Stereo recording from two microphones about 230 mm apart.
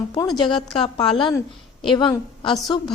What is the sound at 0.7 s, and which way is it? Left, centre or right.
A woman's voice, left.